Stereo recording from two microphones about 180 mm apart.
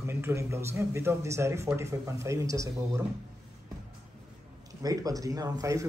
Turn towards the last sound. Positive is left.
turn(degrees=-20)  # may be behind; listen again after turning